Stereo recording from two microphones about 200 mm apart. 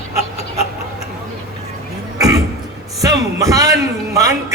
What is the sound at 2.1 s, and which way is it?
Cough, 20° right (ahead or behind).